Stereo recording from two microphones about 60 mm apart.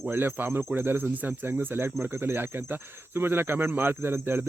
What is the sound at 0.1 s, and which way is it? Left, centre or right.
Speech, right.